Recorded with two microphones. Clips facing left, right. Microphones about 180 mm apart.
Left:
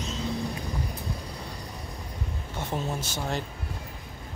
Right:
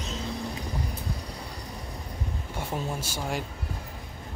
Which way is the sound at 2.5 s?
10° right (ahead or behind).